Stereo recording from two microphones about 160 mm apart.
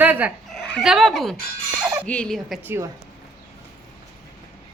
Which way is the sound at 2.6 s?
15° right (ahead or behind).